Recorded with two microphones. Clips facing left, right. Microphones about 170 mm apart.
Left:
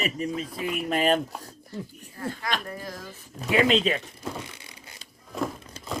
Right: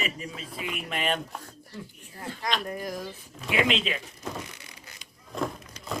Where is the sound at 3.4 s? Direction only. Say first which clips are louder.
Left 5 dB; 40° left (ahead or behind).